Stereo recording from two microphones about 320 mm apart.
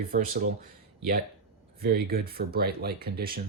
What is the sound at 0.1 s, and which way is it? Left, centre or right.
Speech, right.